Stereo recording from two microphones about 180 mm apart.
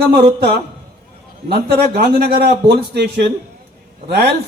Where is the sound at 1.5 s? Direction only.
65° right (ahead or behind).